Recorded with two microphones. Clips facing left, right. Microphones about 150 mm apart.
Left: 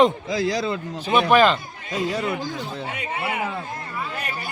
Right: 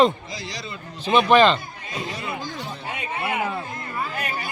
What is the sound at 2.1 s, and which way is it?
Speech, 90° left.